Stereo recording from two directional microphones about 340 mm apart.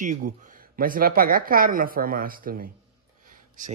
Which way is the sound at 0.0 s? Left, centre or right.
Right.